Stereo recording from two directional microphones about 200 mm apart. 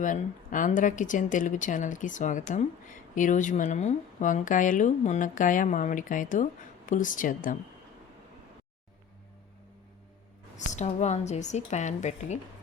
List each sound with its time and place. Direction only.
0.0 s speech: 40° left (ahead or behind)
10.8 s speech: 35° left (ahead or behind)